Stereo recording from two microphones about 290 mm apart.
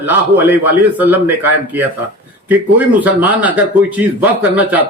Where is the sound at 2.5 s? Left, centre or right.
Centre.